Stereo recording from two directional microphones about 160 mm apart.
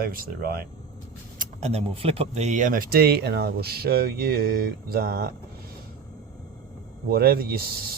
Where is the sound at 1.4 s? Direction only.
40° right (ahead or behind); by 5.3 s 65° right (ahead or behind).